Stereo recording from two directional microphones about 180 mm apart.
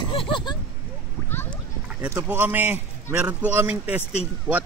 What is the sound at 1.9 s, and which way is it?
A man's voice, 10° right (ahead or behind).